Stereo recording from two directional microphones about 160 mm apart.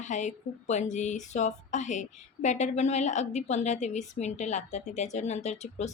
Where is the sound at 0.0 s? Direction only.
50° left (ahead or behind).